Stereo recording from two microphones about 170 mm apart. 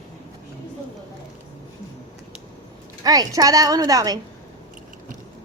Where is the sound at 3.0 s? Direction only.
20° right (ahead or behind).